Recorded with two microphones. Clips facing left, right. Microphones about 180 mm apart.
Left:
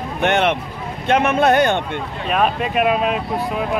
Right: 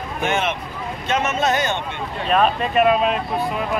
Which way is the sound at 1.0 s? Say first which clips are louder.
Left 6 dB; 60° left (ahead or behind).